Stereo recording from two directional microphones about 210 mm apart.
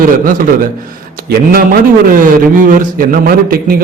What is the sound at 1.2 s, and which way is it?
A man's voice, 45° right (ahead or behind).